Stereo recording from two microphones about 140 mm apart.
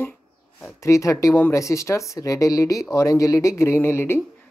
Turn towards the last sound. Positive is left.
turn(degrees=15)  # may be behind; listen again after turning